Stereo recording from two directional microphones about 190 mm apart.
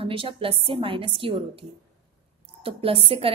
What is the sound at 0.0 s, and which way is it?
A woman's voice, 30° right (ahead or behind).